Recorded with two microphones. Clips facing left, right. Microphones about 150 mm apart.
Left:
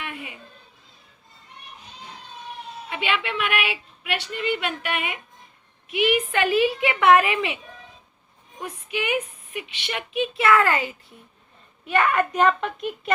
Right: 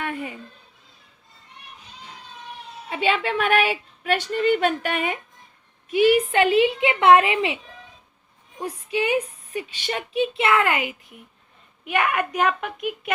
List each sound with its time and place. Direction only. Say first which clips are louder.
0.0 s a sound: right 6 dB; 40° right (ahead or behind)
2.9 s speech: right 4 dB; 35° right (ahead or behind)
8.6 s a woman's voice: right 4 dB; 30° right (ahead or behind); by 13.1 s 10° right (ahead or behind)